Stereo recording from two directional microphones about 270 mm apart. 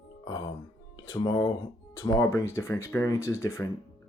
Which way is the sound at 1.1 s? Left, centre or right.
Centre.